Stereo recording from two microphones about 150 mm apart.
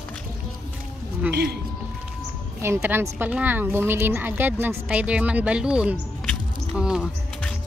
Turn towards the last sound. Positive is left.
turn(degrees=-5)  # may be behind; listen again after turning